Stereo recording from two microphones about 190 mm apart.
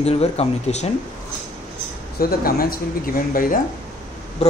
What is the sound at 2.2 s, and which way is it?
Speech, 50° left (ahead or behind).